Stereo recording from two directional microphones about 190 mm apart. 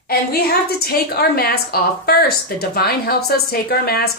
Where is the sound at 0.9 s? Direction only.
55° left (ahead or behind).